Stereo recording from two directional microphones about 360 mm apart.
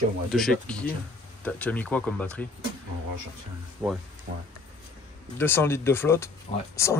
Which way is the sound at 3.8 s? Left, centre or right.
Centre.